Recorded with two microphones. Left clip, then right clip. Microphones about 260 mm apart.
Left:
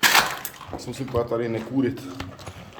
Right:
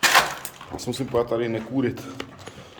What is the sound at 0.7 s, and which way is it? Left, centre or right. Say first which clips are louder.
Speech: right 5 dB; right.